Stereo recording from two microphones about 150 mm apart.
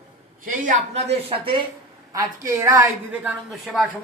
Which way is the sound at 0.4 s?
60° right (ahead or behind).